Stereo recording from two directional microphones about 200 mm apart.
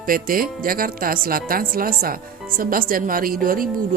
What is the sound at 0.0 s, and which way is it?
A woman's voice, 45° right (ahead or behind).